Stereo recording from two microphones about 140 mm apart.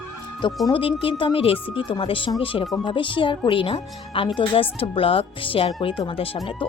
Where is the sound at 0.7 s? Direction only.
40° left (ahead or behind).